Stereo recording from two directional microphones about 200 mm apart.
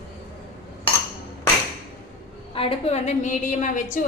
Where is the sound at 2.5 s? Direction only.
25° left (ahead or behind).